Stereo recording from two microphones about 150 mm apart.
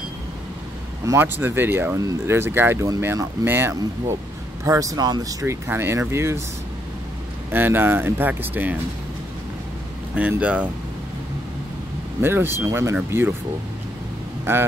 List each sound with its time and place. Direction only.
1.0 s speech: 15° right (ahead or behind)
7.5 s speech: 15° right (ahead or behind)
10.1 s speech: 10° right (ahead or behind)
12.2 s speech: 15° right (ahead or behind)
14.4 s speech: 15° right (ahead or behind)